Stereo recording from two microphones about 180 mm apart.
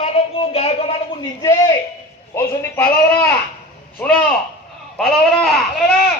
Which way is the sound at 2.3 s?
15° left (ahead or behind).